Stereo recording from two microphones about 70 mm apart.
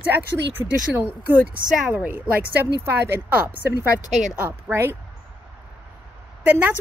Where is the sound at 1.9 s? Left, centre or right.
Right.